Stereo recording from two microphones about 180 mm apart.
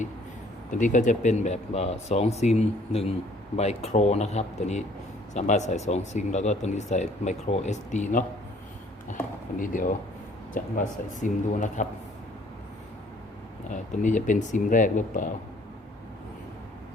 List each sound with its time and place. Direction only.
0.7 s speech: 45° left (ahead or behind)
13.7 s speech: 45° left (ahead or behind)